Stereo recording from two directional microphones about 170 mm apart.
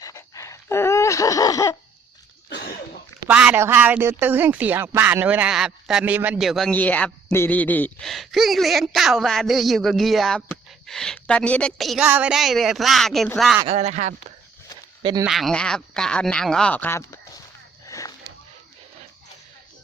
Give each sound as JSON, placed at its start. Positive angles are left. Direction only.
{"t": 0.0, "sound": "a sound", "side_deg": 20}
{"t": 2.5, "sound": "cough", "side_deg": 70}
{"t": 3.2, "sound": "speech", "side_deg": -10}
{"t": 13.7, "sound": "speech", "side_deg": -40}
{"t": 15.2, "sound": "speech", "side_deg": 0}
{"t": 17.8, "sound": "a sound", "side_deg": 20}